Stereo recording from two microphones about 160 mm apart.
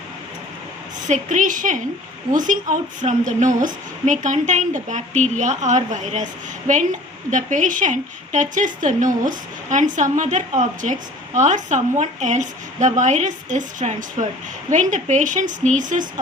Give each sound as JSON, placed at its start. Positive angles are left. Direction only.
{"t": 1.0, "sound": "a woman's voice", "side_deg": -50}
{"t": 7.3, "sound": "a woman's voice", "side_deg": -50}